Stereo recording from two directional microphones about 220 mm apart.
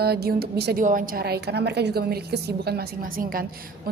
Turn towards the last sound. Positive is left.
turn(degrees=-40)  # may be behind; listen again after turning